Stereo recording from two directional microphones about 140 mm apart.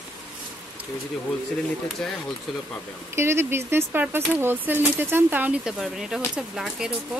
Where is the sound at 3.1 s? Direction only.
20° right (ahead or behind).